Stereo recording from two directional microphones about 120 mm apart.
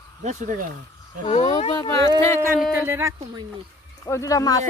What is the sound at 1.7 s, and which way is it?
Speech, 35° left (ahead or behind).